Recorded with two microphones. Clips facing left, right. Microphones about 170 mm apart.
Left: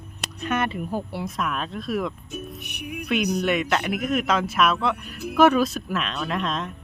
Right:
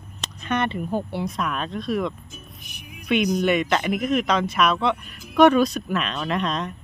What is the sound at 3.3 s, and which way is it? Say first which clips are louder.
Speech: right 2 dB; centre (ahead or behind).